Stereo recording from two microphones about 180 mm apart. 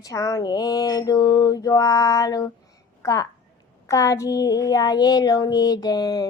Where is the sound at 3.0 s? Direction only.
20° left (ahead or behind).